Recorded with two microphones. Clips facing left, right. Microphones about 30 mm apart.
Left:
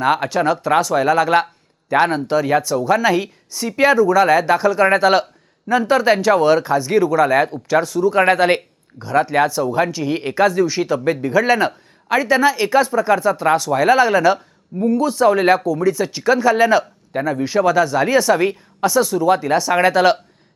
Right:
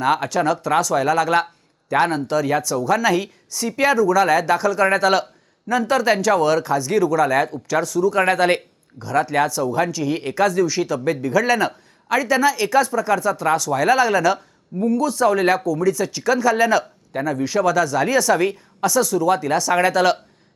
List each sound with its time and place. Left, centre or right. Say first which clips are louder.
0.0 s a woman's voice: left 2 dB; centre